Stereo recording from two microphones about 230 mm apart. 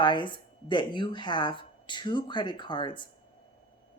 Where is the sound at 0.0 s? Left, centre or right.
Left.